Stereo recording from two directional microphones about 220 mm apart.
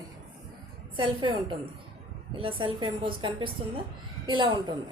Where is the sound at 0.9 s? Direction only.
20° right (ahead or behind).